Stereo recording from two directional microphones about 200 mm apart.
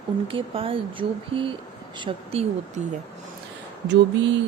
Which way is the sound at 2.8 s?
35° right (ahead or behind).